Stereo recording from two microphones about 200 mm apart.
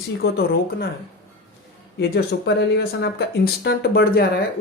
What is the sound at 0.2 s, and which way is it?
Speech, 50° left (ahead or behind).